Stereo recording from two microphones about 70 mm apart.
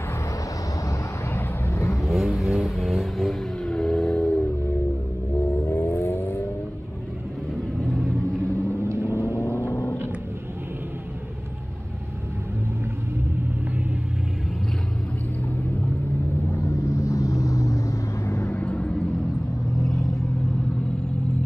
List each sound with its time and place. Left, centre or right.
1.3 s vehicle: left
2.0 s vehicle: centre
5.7 s vehicle: left
7.8 s vehicle: centre
8.8 s vehicle: right
9.7 s a sound: left
16.6 s vehicle: left
18.5 s vehicle: left